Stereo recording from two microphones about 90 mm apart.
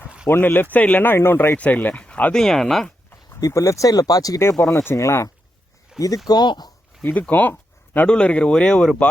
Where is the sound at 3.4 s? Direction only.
35° left (ahead or behind).